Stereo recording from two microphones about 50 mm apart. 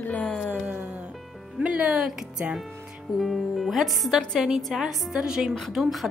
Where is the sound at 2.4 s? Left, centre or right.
Right.